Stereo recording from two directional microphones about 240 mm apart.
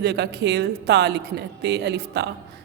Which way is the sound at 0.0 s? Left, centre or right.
Right.